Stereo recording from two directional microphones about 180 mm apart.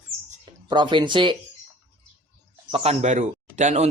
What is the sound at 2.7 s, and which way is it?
Speech, 40° right (ahead or behind).